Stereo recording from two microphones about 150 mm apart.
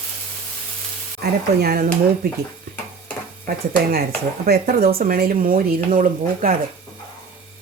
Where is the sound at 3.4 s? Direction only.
90° right; by 6.5 s 65° right (ahead or behind).